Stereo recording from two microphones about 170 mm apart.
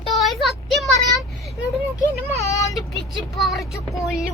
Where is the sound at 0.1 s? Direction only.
Centre (ahead or behind).